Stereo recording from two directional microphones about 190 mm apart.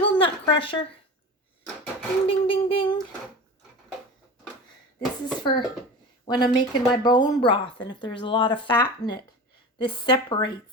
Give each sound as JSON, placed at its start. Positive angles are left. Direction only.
{"t": 0.1, "sound": "speech", "side_deg": 25}
{"t": 2.2, "sound": "speech", "side_deg": 30}
{"t": 4.9, "sound": "speech", "side_deg": 20}